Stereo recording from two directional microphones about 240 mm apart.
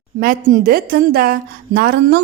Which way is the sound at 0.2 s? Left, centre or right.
Right.